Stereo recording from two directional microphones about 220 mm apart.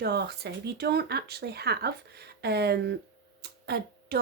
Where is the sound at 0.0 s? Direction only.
45° right (ahead or behind).